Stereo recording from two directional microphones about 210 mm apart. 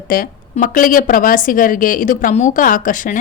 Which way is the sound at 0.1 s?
40° left (ahead or behind).